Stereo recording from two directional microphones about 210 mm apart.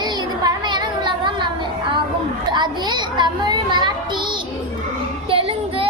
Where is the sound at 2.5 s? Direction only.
20° right (ahead or behind).